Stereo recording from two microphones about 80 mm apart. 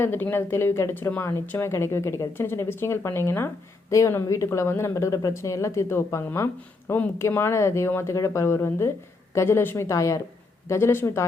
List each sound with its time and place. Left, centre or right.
0.0 s speech: left
3.8 s speech: left